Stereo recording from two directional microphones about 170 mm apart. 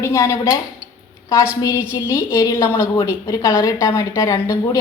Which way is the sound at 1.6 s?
20° left (ahead or behind).